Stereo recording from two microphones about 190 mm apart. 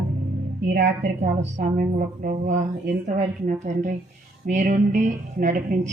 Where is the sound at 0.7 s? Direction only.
50° right (ahead or behind).